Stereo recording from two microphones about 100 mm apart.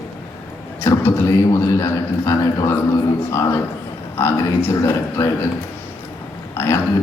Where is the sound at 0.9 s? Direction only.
25° left (ahead or behind).